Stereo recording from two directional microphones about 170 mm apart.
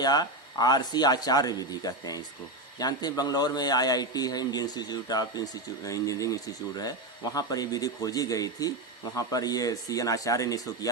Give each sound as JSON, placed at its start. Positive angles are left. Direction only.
{"t": 0.0, "sound": "speech", "side_deg": 25}